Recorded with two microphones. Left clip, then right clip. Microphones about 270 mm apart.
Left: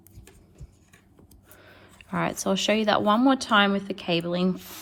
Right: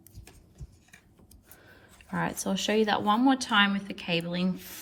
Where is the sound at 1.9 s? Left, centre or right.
Left.